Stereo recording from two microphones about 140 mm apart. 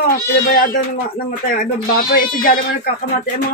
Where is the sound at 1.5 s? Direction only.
90° left.